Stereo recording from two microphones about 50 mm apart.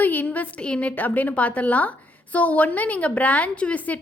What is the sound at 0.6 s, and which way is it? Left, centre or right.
A woman's voice, left.